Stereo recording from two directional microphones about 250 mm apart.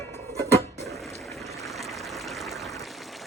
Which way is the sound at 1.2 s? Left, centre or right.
Centre.